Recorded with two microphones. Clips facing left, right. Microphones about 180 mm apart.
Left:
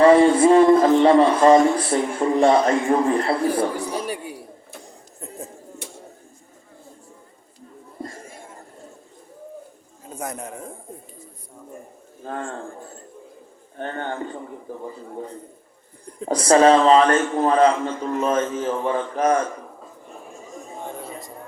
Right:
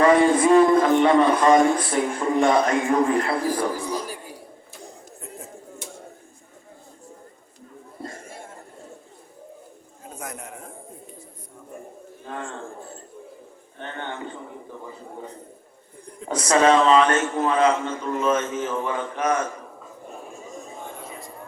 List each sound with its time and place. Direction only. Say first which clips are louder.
0.0 s a sound: left 4 dB; 30° left (ahead or behind)
2.4 s a man's voice: left 3 dB; 30° left (ahead or behind)
3.8 s a man's voice: left 2 dB; 65° left (ahead or behind)
10.2 s a man's voice: left 6 dB; 35° left (ahead or behind)
12.2 s a man's voice: left 4 dB; 45° left (ahead or behind)
13.7 s a man's voice: left 5 dB; 40° left (ahead or behind)
16.2 s a man's voice: left 4 dB; 30° left (ahead or behind)